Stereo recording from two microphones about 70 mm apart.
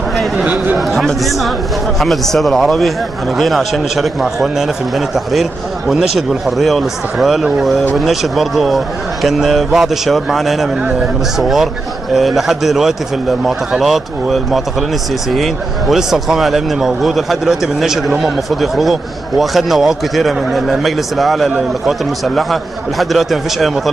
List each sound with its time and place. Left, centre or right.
0.1 s a sound: centre
0.7 s speech: centre
10.8 s a man's voice: centre
11.3 s speech: centre
21.5 s a man's voice: centre
22.2 s speech: centre